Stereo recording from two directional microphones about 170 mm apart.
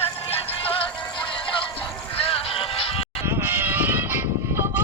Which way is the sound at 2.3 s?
35° left (ahead or behind).